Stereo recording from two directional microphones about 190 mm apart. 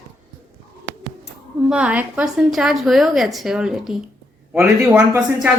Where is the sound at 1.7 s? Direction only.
5° right (ahead or behind).